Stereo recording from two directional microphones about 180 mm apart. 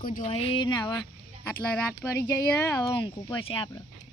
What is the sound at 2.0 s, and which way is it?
Speech, 15° left (ahead or behind).